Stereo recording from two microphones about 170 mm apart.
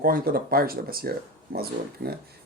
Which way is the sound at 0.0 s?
60° right (ahead or behind).